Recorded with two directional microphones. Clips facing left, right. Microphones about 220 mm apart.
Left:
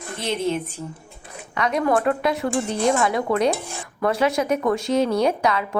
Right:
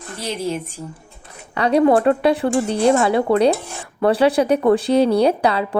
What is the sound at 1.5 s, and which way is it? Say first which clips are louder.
Speech: right 6 dB; 30° right (ahead or behind).